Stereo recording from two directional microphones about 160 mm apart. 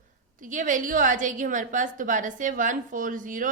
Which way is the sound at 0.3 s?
55° right (ahead or behind).